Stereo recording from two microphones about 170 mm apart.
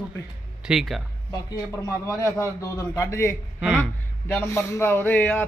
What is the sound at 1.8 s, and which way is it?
A man's voice, 15° left (ahead or behind).